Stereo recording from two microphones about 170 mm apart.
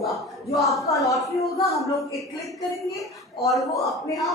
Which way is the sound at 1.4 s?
20° left (ahead or behind).